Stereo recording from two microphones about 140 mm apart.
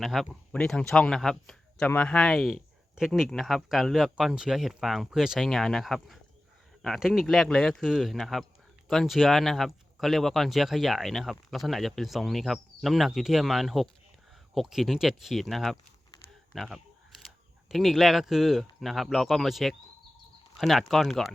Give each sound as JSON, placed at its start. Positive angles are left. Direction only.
{"t": 0.0, "sound": "speech", "side_deg": 0}